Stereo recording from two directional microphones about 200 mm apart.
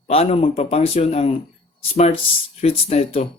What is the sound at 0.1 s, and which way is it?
Speech, 30° left (ahead or behind).